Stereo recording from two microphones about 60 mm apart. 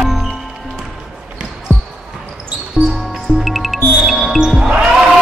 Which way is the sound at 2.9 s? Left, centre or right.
Centre.